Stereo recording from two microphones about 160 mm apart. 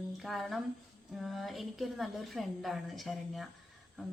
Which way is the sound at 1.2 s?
Centre (ahead or behind).